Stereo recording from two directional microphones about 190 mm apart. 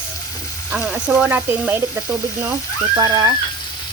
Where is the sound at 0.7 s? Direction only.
5° right (ahead or behind).